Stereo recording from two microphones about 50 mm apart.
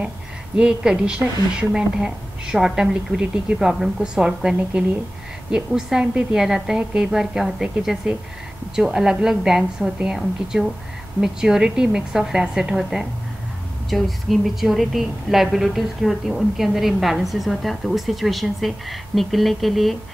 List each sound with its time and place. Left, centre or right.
0.6 s a woman's voice: centre
11.1 s a woman's voice: centre
13.8 s a woman's voice: centre